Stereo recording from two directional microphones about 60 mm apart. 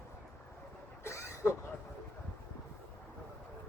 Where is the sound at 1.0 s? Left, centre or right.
Left.